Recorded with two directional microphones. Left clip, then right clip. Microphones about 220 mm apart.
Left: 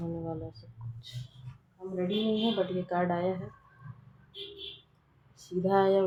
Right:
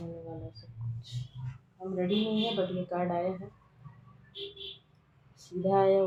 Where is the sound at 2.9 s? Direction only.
45° left (ahead or behind).